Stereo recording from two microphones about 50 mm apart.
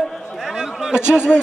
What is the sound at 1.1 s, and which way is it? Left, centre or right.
Speech, centre.